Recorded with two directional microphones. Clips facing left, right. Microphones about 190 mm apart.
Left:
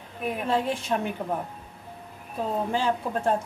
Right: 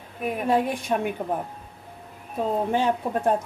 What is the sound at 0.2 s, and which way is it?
Speech, 10° right (ahead or behind).